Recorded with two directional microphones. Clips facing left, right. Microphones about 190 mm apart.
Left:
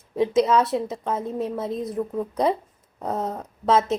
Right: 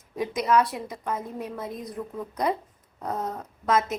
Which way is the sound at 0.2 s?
25° left (ahead or behind).